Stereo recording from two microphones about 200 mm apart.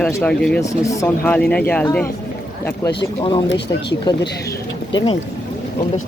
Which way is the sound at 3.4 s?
60° left (ahead or behind).